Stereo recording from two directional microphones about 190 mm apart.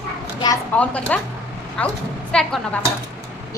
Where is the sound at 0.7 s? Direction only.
5° left (ahead or behind).